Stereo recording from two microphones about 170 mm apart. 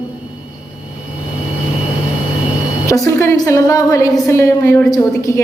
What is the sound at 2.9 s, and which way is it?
A woman's voice, 20° left (ahead or behind).